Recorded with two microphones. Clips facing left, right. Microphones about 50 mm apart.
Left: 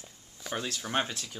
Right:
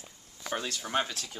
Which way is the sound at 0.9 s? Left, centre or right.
Centre.